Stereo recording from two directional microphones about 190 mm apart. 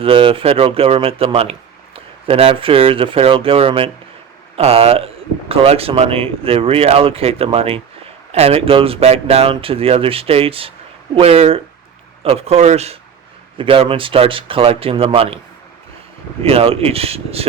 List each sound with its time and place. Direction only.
0.0 s speech: 30° right (ahead or behind)
16.4 s speech: 30° right (ahead or behind)